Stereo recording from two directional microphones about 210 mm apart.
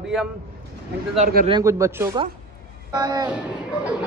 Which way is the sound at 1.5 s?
15° right (ahead or behind).